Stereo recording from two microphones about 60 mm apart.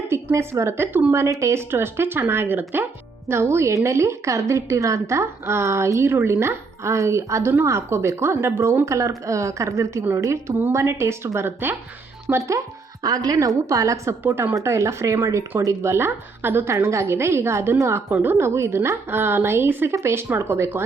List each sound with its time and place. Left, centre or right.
0.1 s a woman's voice: right
1.7 s speech: right
3.2 s a woman's voice: right
10.6 s a woman's voice: right
12.5 s speech: right
13.7 s a woman's voice: right
16.6 s a woman's voice: right
18.1 s a woman's voice: right